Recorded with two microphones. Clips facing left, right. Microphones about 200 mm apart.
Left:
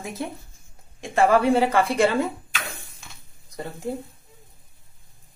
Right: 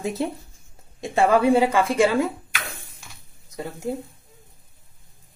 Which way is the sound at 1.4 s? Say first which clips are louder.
Right 1 dB; 10° right (ahead or behind).